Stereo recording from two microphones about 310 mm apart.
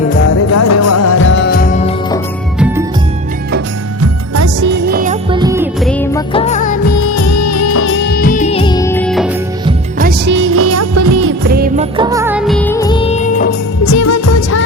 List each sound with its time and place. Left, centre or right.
0.5 s music: left
4.0 s music: right
4.6 s music: right
5.3 s music: centre
5.8 s music: centre
6.3 s music: left
7.2 s music of bollywood: left; by 9.3 s centre
10.0 s music: right
11.4 s music: right
11.9 s music of bollywood: centre; by 13.5 s left
13.8 s music of bollywood: left